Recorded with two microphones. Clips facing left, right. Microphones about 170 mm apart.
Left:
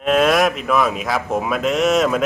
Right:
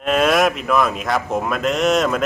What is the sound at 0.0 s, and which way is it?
Speech, centre (ahead or behind).